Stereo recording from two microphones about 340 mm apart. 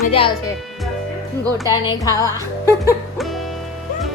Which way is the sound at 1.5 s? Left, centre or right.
Centre.